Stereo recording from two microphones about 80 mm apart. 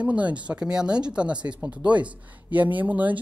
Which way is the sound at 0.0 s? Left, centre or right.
Centre.